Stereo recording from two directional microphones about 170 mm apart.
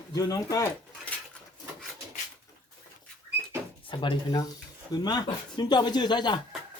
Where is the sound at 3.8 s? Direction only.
30° left (ahead or behind).